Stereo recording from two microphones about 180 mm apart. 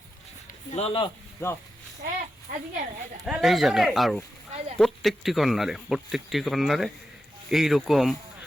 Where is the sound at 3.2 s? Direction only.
Centre (ahead or behind).